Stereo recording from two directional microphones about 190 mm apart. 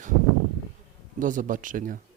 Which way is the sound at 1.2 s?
45° right (ahead or behind).